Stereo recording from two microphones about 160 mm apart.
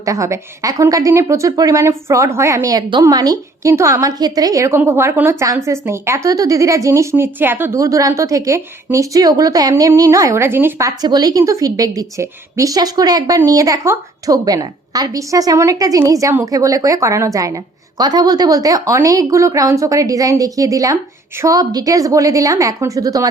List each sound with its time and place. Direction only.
0.0 s a woman's voice: 20° right (ahead or behind)